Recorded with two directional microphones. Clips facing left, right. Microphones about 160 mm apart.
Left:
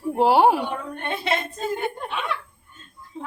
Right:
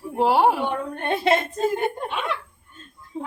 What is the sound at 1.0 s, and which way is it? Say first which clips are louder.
Speech: right 6 dB; 45° right (ahead or behind).